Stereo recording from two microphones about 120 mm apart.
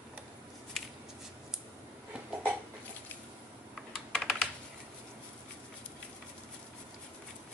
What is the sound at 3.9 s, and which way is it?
Computer keyboard, 5° left (ahead or behind).